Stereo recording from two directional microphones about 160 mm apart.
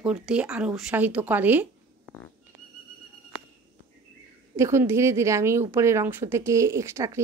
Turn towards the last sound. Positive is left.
turn(degrees=-15)  # may be behind; listen again after turning